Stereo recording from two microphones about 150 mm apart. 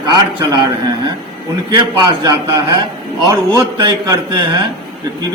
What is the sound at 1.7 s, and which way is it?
A man's voice, 30° right (ahead or behind).